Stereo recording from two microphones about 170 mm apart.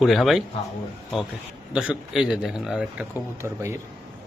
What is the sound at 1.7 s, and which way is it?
A man's voice, 5° right (ahead or behind).